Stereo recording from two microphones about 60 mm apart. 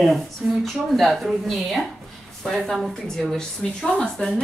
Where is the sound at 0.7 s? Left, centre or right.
Centre.